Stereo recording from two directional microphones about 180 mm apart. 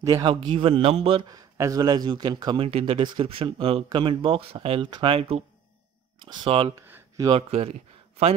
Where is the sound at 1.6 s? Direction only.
20° right (ahead or behind).